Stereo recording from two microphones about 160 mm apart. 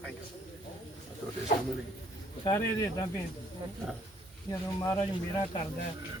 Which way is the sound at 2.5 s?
25° left (ahead or behind).